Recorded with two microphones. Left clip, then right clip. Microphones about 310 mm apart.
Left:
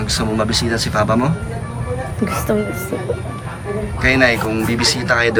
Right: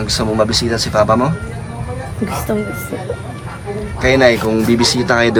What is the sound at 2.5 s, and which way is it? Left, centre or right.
Speech, centre.